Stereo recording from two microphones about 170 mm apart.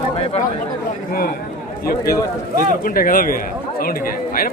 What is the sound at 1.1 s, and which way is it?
Speech, 60° left (ahead or behind).